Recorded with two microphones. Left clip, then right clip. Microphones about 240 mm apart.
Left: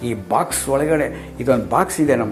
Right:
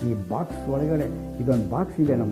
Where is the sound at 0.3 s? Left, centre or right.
Centre.